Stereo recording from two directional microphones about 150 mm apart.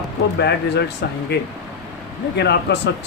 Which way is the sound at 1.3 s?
90° left.